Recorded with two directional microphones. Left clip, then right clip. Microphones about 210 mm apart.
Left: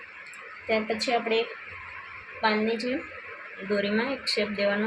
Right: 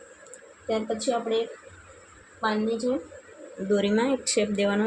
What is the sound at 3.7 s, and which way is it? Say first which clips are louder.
Speech: right 3 dB; 35° right (ahead or behind).